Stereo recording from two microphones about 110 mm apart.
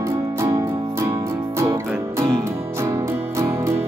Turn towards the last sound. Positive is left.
turn(degrees=-25)  # may be behind; listen again after turning